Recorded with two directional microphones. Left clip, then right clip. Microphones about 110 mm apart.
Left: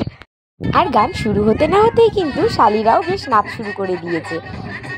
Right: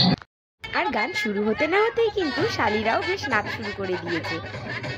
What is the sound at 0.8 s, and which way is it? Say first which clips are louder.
A woman's voice: left 9 dB; 50° left (ahead or behind).